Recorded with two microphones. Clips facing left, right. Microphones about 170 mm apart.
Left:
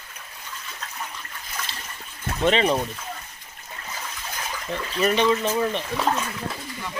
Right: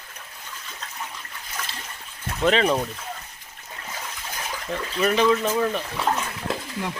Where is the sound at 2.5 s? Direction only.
Centre (ahead or behind).